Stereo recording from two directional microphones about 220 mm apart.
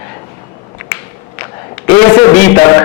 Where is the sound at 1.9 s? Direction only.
20° left (ahead or behind).